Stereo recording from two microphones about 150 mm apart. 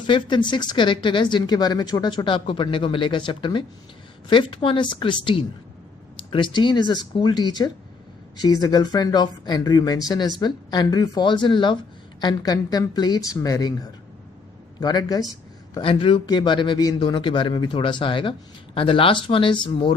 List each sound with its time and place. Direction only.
0.1 s a man's voice: 30° left (ahead or behind)
14.8 s a man's voice: 25° left (ahead or behind)